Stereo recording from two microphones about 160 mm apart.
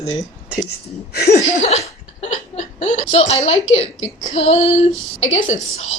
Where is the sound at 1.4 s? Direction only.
45° left (ahead or behind).